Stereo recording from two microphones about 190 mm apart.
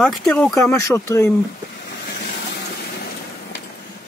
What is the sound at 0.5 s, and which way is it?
Speech, 15° left (ahead or behind).